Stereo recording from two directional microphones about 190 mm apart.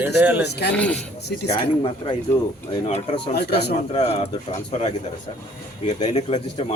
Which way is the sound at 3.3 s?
60° left (ahead or behind).